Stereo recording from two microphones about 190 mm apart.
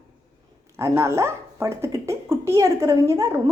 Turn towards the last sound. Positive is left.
turn(degrees=-15)  # may be behind; listen again after turning